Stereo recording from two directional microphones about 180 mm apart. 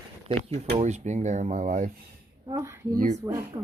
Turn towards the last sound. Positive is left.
turn(degrees=-15)  # may be behind; listen again after turning